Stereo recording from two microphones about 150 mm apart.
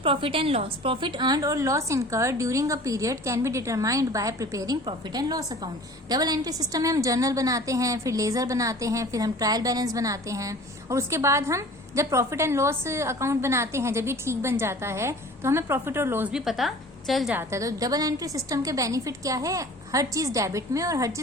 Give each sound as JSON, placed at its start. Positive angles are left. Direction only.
{"t": 0.0, "sound": "a woman's voice", "side_deg": -35}
{"t": 16.3, "sound": "a woman's voice", "side_deg": 0}
{"t": 17.3, "sound": "a woman's voice", "side_deg": -20}